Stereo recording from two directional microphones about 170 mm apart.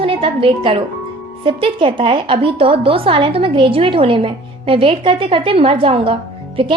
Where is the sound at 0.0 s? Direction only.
30° right (ahead or behind).